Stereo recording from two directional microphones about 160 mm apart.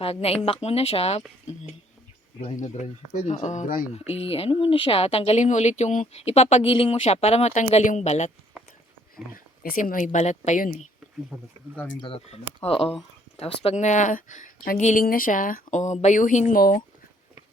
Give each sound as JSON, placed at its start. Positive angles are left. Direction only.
{"t": 0.0, "sound": "speech", "side_deg": 40}
{"t": 2.4, "sound": "speech", "side_deg": 40}
{"t": 3.9, "sound": "speech", "side_deg": 40}
{"t": 9.3, "sound": "speech", "side_deg": 60}
{"t": 11.3, "sound": "speech", "side_deg": 0}
{"t": 12.0, "sound": "speech", "side_deg": 35}
{"t": 15.0, "sound": "speech", "side_deg": 60}
{"t": 16.6, "sound": "speech", "side_deg": 65}